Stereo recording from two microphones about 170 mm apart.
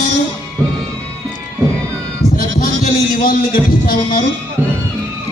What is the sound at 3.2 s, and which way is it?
Speech, 55° left (ahead or behind).